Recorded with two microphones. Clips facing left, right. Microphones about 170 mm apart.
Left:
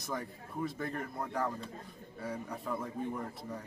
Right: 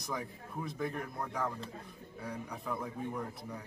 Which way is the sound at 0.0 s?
Centre (ahead or behind).